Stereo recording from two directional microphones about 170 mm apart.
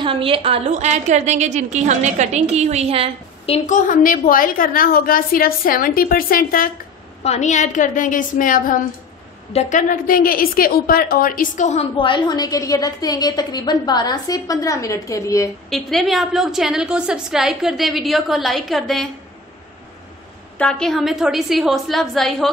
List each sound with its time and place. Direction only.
0.0 s a woman's voice: 30° right (ahead or behind)
3.4 s a woman's voice: 40° left (ahead or behind); by 6.7 s 55° left (ahead or behind)
7.2 s a woman's voice: 45° left (ahead or behind); by 15.5 s 20° left (ahead or behind)
15.7 s a woman's voice: centre (ahead or behind)
20.5 s a woman's voice: 5° left (ahead or behind)